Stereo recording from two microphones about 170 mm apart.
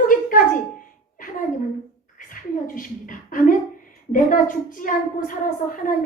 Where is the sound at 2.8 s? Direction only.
50° left (ahead or behind).